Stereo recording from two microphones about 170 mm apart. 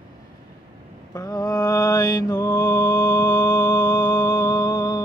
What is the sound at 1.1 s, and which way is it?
Mantra, 20° left (ahead or behind).